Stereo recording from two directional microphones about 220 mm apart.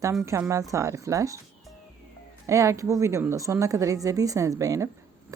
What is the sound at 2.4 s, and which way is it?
A woman's voice, 15° right (ahead or behind).